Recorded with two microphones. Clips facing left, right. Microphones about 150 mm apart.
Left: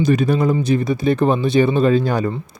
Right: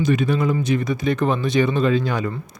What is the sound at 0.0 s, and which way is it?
Speech, 40° left (ahead or behind).